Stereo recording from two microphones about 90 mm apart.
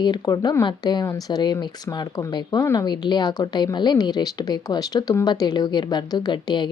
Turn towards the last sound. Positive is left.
turn(degrees=55)  # may be behind; listen again after turning